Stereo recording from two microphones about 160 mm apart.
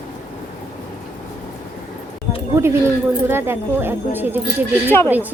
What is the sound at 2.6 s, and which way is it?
Speech, 15° right (ahead or behind).